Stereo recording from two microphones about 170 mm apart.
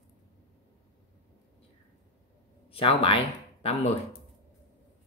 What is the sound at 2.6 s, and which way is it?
Speech, 35° left (ahead or behind).